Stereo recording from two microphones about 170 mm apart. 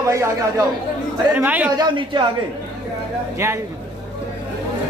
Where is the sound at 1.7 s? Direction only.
30° right (ahead or behind).